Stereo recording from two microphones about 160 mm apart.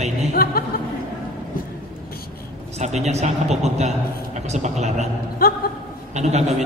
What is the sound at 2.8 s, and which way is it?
A man's voice, 45° right (ahead or behind).